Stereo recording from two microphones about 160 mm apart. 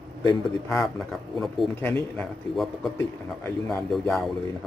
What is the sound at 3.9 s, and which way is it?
Speech, centre (ahead or behind).